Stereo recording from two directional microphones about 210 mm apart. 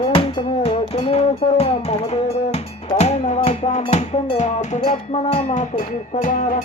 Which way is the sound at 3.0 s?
30° left (ahead or behind).